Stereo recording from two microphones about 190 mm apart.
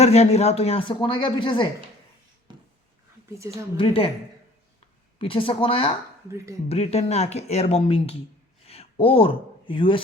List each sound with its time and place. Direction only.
0.0 s speech: 35° left (ahead or behind)
2.5 s wood: 25° right (ahead or behind)
3.2 s a woman's voice: 15° right (ahead or behind)
3.8 s speech: 30° left (ahead or behind)
5.2 s speech: 25° left (ahead or behind)
6.3 s a woman's voice: 15° right (ahead or behind)
6.7 s speech: 35° left (ahead or behind)
8.6 s a sound: 30° left (ahead or behind)